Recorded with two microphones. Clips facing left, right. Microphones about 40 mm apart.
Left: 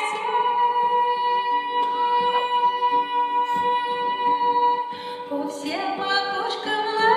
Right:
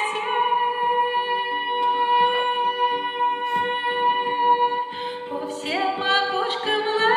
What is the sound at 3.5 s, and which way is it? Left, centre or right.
Music, right.